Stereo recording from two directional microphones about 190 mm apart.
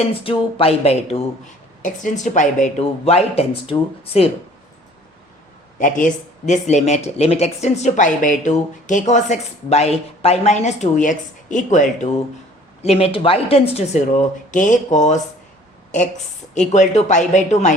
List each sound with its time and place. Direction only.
0.0 s speech: 30° left (ahead or behind)
1.8 s speech: 40° left (ahead or behind)
5.8 s speech: 45° left (ahead or behind)
16.6 s speech: 40° left (ahead or behind)